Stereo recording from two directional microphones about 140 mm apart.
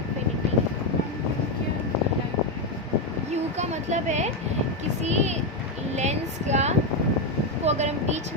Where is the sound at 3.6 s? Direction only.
55° right (ahead or behind).